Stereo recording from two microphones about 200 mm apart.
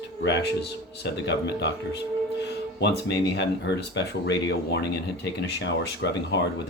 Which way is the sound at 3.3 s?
60° left (ahead or behind).